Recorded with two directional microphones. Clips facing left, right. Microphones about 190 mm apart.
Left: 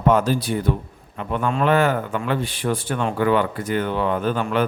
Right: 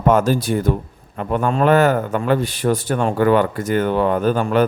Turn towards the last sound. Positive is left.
turn(degrees=-40)  # may be behind; listen again after turning